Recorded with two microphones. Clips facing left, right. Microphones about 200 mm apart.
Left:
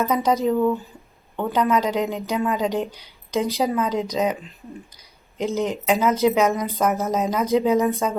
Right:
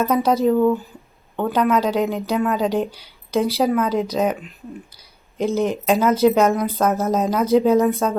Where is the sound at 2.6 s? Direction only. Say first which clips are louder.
Right 3 dB; 15° right (ahead or behind).